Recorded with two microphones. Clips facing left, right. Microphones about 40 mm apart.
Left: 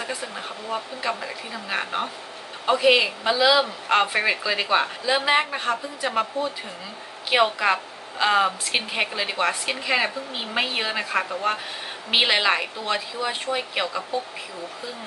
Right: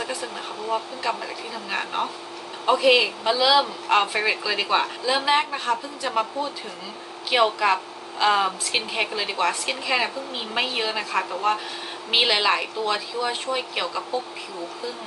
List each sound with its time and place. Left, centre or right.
1.0 s speech: centre
7.2 s speech: centre